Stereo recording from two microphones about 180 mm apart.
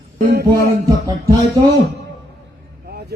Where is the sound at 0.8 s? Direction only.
20° right (ahead or behind).